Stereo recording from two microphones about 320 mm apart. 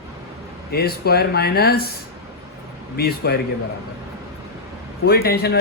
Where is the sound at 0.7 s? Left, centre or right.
Left.